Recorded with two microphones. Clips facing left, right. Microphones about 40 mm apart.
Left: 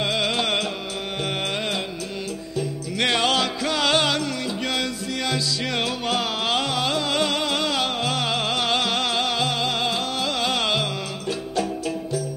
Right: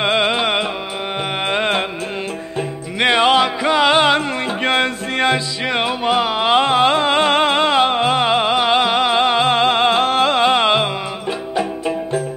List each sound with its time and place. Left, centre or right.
0.0 s music: right
1.4 s music: right
3.0 s music: right